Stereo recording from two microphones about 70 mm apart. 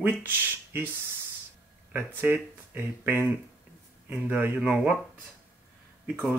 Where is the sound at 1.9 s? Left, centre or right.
Right.